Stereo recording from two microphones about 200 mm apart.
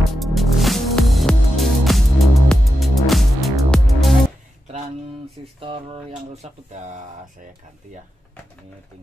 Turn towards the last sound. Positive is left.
turn(degrees=-40)  # may be behind; listen again after turning